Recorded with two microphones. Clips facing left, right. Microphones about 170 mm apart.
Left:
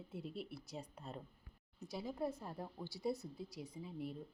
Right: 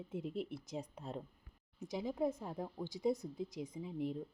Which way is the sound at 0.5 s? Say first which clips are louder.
Right 5 dB; 90° right.